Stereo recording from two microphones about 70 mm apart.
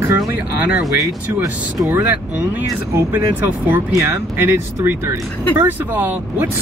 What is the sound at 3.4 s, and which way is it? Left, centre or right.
Speech, right.